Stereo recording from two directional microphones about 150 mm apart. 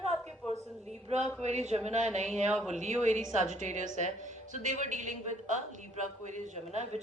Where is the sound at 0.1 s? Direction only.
5° left (ahead or behind).